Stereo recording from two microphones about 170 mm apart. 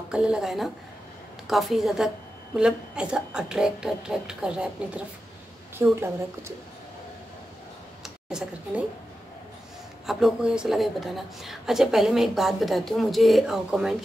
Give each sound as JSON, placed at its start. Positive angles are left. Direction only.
{"t": 0.1, "sound": "speech", "side_deg": -5}
{"t": 5.8, "sound": "a woman's voice", "side_deg": -15}
{"t": 8.0, "sound": "a sound", "side_deg": -5}
{"t": 10.0, "sound": "speech", "side_deg": -5}